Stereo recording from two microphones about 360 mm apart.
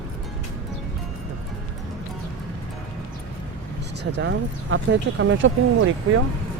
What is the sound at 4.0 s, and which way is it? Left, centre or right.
Speech, right.